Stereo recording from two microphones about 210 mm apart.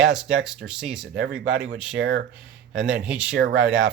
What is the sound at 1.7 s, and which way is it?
Speech, 5° right (ahead or behind).